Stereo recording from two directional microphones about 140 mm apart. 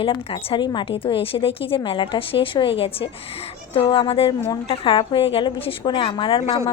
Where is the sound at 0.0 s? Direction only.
40° left (ahead or behind).